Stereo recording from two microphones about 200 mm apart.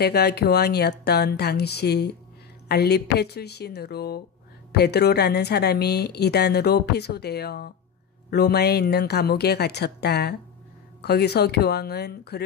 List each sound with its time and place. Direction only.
0.0 s a woman's voice: 55° left (ahead or behind)